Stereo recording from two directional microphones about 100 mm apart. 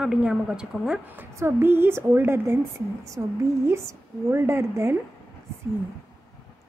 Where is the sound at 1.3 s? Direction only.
25° right (ahead or behind).